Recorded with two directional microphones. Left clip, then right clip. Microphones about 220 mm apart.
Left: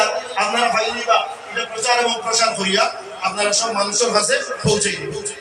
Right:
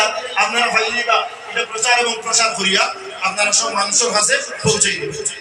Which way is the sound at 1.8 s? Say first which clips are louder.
Right 1 dB; 35° right (ahead or behind).